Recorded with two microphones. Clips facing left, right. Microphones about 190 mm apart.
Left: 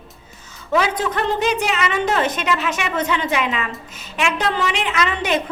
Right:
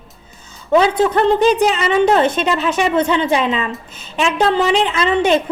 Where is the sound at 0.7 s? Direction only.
30° right (ahead or behind).